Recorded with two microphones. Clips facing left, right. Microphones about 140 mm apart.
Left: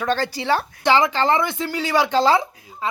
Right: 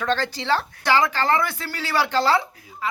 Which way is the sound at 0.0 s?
10° left (ahead or behind).